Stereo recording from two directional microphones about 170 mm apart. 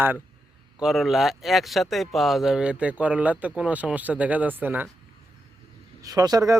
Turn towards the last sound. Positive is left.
turn(degrees=-20)  # may be behind; listen again after turning